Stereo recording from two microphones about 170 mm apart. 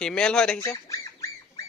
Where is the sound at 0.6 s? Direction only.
20° left (ahead or behind).